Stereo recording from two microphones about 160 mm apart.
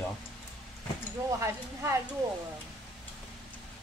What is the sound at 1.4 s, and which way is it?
Speech, 15° right (ahead or behind).